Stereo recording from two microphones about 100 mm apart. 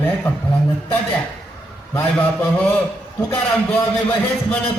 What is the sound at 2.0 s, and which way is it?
Speech, 15° left (ahead or behind).